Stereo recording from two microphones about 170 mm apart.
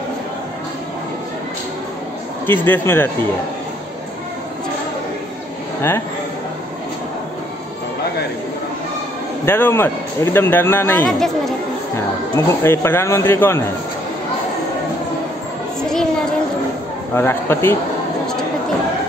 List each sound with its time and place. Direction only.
2.4 s speech: 10° left (ahead or behind)
5.8 s speech: 15° left (ahead or behind)
9.5 s speech: 15° left (ahead or behind)
11.1 s speech: centre (ahead or behind)
12.4 s speech: 15° left (ahead or behind)
17.1 s speech: 15° left (ahead or behind)